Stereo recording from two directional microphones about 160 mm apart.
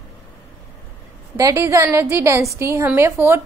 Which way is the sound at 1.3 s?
20° right (ahead or behind).